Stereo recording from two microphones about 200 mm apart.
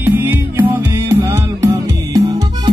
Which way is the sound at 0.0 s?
10° right (ahead or behind).